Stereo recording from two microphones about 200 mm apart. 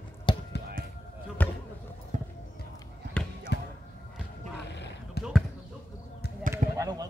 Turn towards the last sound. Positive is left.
turn(degrees=-15)  # may be behind; listen again after turning